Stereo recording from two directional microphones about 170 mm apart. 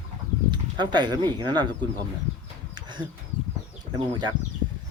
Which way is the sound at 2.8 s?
25° right (ahead or behind).